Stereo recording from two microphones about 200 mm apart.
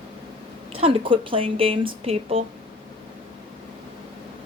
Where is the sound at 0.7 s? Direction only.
25° right (ahead or behind).